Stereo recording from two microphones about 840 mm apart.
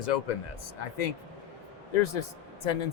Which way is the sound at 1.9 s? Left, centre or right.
Left.